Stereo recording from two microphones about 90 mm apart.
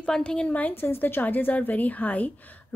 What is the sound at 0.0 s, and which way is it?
A woman's voice, 10° left (ahead or behind).